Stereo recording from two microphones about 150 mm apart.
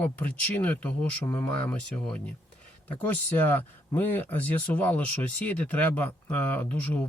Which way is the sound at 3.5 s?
10° left (ahead or behind).